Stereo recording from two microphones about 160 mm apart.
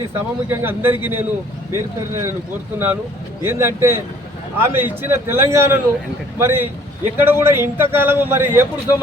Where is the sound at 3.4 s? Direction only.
15° right (ahead or behind).